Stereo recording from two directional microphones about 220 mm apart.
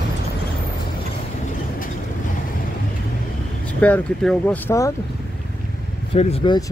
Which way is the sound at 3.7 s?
5° left (ahead or behind).